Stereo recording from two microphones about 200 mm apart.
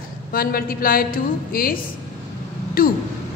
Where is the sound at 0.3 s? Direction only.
45° left (ahead or behind).